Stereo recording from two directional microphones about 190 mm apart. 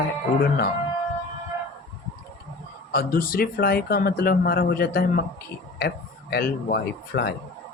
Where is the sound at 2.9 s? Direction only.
50° left (ahead or behind).